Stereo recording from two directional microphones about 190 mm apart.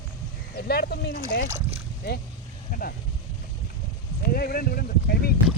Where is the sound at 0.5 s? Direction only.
55° left (ahead or behind).